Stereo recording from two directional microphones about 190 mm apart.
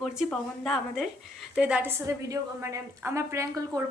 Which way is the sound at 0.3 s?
5° left (ahead or behind).